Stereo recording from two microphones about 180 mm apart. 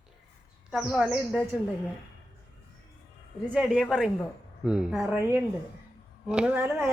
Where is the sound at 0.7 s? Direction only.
5° right (ahead or behind).